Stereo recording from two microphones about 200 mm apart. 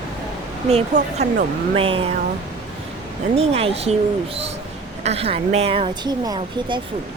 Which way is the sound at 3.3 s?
30° right (ahead or behind).